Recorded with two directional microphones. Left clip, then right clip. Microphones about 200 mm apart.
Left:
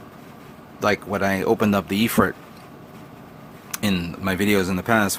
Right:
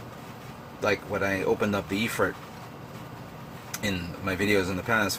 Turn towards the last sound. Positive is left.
turn(degrees=40)  # may be behind; listen again after turning